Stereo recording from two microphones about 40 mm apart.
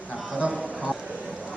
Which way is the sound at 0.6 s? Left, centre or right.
Left.